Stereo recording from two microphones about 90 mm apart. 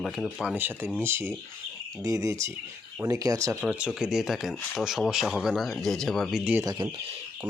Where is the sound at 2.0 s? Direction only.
40° right (ahead or behind).